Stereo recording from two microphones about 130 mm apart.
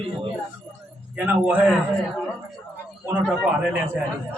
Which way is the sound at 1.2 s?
10° right (ahead or behind).